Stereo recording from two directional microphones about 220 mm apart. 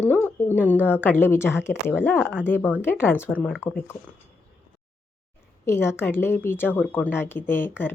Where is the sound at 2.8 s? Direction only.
10° left (ahead or behind).